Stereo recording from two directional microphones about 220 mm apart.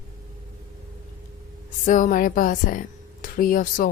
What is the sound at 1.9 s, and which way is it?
Speech, 35° left (ahead or behind).